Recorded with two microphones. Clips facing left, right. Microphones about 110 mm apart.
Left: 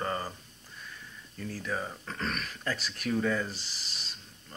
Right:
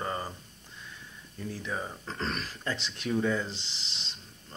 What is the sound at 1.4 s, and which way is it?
Speech, 20° right (ahead or behind).